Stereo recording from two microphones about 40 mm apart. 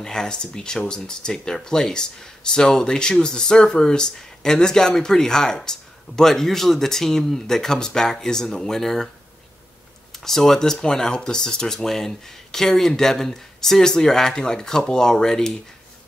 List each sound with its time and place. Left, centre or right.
0.0 s speech: centre
10.1 s speech: centre